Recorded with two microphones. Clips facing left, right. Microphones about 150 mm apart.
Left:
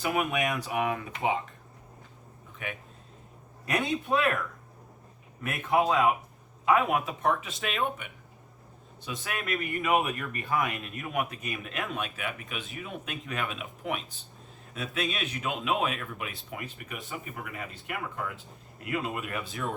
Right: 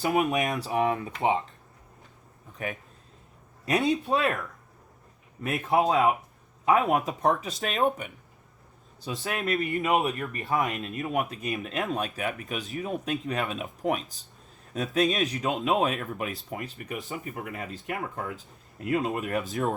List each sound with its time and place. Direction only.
0.0 s speech: 35° right (ahead or behind)
2.6 s speech: 40° right (ahead or behind)
5.4 s speech: 30° right (ahead or behind)
6.9 s speech: 40° right (ahead or behind)
9.2 s speech: 35° right (ahead or behind)